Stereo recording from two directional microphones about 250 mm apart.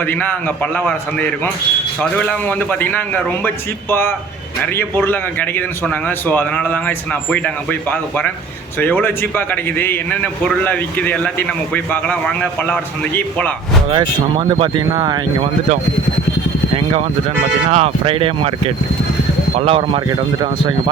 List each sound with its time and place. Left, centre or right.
0.0 s a man's voice: centre
13.9 s speech: centre
16.7 s speech: right